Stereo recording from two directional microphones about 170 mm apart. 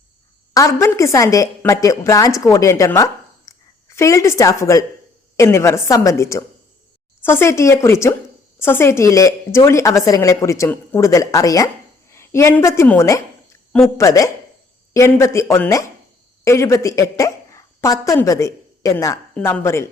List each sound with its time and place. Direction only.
0.5 s a woman's voice: 20° left (ahead or behind)